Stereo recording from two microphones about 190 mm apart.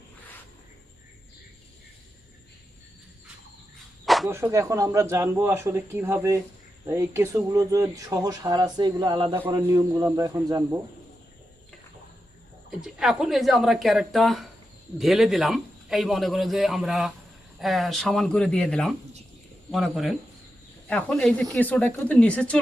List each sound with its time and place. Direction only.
4.0 s a sound: centre (ahead or behind)
4.3 s speech: 15° right (ahead or behind)
12.8 s a man's voice: centre (ahead or behind)